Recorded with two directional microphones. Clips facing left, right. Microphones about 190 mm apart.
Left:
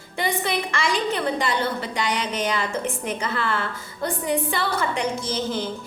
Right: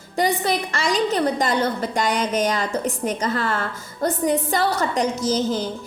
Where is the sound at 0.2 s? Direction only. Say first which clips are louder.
Right 4 dB; 40° right (ahead or behind).